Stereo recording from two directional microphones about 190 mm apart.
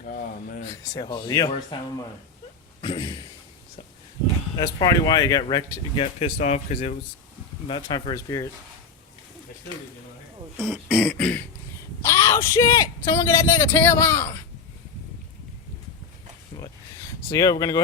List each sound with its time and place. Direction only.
0.9 s speech: 20° left (ahead or behind)
4.5 s speech: 20° left (ahead or behind)
6.4 s speech: 35° left (ahead or behind)
7.7 s speech: 25° left (ahead or behind)
10.6 s beatboxing: centre (ahead or behind)
12.0 s speech: 15° left (ahead or behind)
17.2 s speech: 20° left (ahead or behind)